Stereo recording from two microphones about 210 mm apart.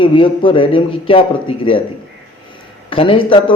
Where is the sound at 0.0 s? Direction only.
25° left (ahead or behind).